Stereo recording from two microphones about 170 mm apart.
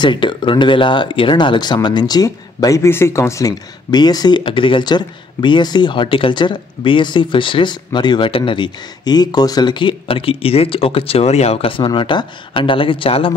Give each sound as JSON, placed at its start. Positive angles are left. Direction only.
{"t": 0.0, "sound": "speech", "side_deg": 25}